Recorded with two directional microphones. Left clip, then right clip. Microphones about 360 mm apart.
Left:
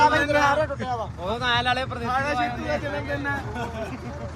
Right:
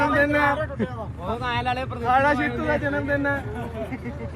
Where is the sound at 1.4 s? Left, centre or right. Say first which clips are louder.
Left 3 dB; left.